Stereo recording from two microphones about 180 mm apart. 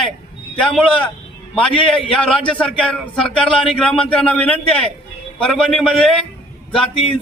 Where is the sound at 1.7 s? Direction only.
30° left (ahead or behind).